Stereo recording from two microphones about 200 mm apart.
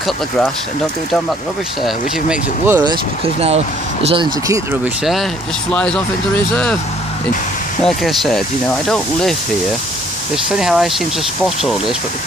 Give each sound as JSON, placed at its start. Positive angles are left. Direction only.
{"t": 1.8, "sound": "speech", "side_deg": -5}
{"t": 2.8, "sound": "speech", "side_deg": -25}
{"t": 5.7, "sound": "speech", "side_deg": 5}
{"t": 7.8, "sound": "speech", "side_deg": 0}
{"t": 10.3, "sound": "speech", "side_deg": 0}